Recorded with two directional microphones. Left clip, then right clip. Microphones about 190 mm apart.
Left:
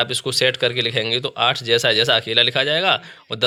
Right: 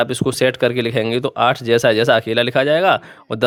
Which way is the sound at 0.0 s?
45° right (ahead or behind).